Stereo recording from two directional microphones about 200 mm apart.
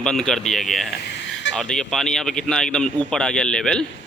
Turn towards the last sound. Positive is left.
turn(degrees=5)  # may be behind; listen again after turning